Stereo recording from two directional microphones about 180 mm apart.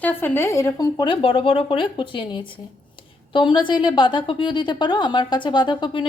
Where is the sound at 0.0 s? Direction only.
10° left (ahead or behind).